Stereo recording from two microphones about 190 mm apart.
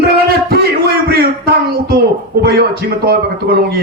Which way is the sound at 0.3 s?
55° right (ahead or behind).